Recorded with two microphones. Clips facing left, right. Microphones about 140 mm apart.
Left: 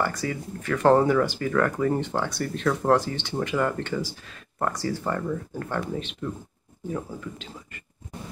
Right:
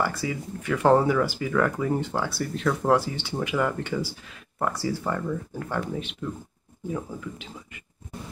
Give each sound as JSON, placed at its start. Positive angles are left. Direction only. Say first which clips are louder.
{"t": 0.0, "sound": "speech", "louder": "even", "side_deg": -10}